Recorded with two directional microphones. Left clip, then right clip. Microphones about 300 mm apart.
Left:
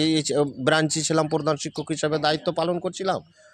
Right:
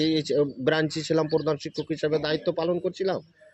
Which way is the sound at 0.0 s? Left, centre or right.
Left.